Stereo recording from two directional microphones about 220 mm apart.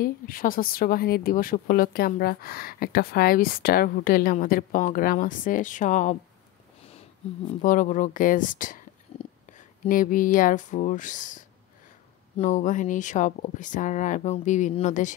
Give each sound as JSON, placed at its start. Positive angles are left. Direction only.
{"t": 0.0, "sound": "a woman's voice", "side_deg": 40}
{"t": 7.4, "sound": "a woman's voice", "side_deg": 35}
{"t": 9.1, "sound": "a sound", "side_deg": 25}
{"t": 9.5, "sound": "a woman's voice", "side_deg": 35}